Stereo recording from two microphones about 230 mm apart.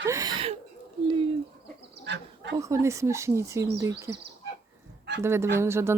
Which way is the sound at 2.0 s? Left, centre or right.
Right.